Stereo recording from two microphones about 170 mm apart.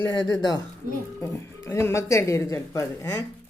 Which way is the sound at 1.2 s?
15° left (ahead or behind).